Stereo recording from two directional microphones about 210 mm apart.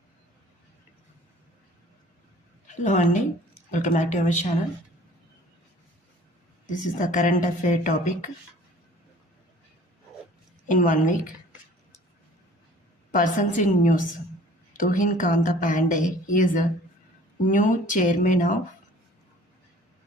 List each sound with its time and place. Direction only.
2.6 s a woman's voice: 35° left (ahead or behind)
6.7 s a woman's voice: 35° left (ahead or behind)
10.7 s a woman's voice: 40° left (ahead or behind)
13.1 s a woman's voice: 40° left (ahead or behind)